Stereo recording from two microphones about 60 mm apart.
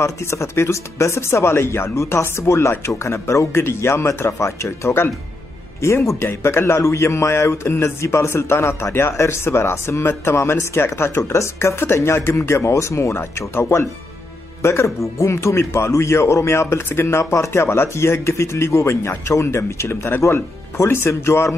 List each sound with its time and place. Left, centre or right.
0.0 s speech: left
6.2 s speech: left